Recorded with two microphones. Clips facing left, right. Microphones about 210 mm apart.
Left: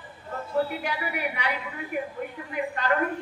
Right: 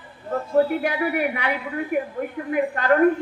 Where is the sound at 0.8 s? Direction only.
55° right (ahead or behind).